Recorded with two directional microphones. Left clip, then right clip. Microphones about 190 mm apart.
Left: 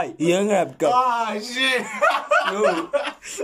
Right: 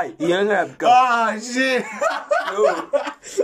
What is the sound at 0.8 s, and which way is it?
Speech, 60° right (ahead or behind).